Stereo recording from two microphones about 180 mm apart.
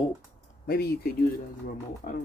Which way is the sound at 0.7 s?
60° left (ahead or behind).